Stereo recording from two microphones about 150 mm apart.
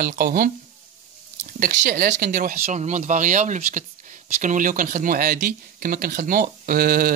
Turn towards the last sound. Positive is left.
turn(degrees=-70)  # may be behind; listen again after turning